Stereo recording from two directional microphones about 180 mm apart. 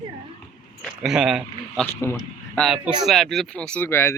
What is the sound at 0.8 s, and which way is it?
Speech, 5° right (ahead or behind).